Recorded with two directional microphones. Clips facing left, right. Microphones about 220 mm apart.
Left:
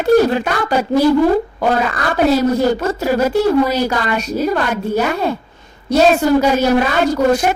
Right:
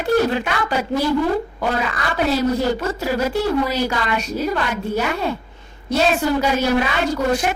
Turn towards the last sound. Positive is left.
turn(degrees=40)  # may be behind; listen again after turning